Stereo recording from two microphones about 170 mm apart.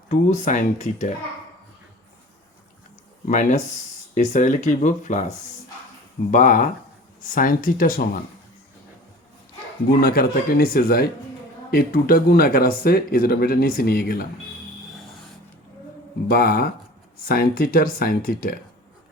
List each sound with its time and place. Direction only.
0.1 s speech: 45° left (ahead or behind)
3.2 s speech: 50° left (ahead or behind)
6.3 s speech: 50° left (ahead or behind)
10.0 s speech: 60° left (ahead or behind)
16.3 s speech: 65° left (ahead or behind)